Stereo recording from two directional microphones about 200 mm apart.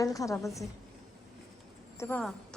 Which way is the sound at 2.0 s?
10° left (ahead or behind).